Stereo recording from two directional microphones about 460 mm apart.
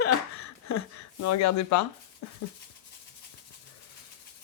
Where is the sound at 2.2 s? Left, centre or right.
Left.